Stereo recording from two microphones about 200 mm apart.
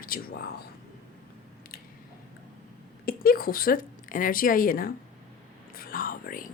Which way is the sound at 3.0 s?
45° left (ahead or behind).